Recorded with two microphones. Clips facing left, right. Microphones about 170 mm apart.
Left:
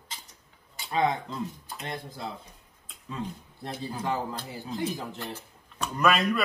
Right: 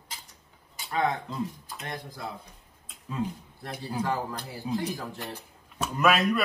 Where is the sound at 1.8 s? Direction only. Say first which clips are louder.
Left 1 dB; 25° left (ahead or behind).